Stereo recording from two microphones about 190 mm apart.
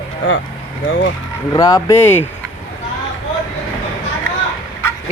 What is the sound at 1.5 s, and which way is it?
Speech, 20° left (ahead or behind).